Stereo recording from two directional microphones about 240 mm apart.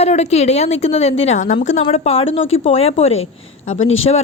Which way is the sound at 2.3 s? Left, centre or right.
Left.